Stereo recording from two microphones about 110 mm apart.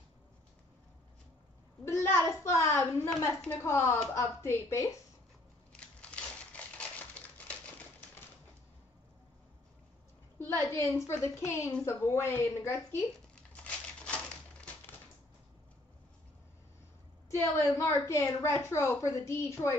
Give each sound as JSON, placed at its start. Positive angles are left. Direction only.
{"t": 1.9, "sound": "a sound", "side_deg": 25}
{"t": 3.6, "sound": "a woman's voice", "side_deg": 25}
{"t": 5.7, "sound": "crumpling", "side_deg": 10}
{"t": 10.4, "sound": "a woman's voice", "side_deg": 25}
{"t": 13.3, "sound": "a sound", "side_deg": 10}
{"t": 17.3, "sound": "a woman's voice", "side_deg": 25}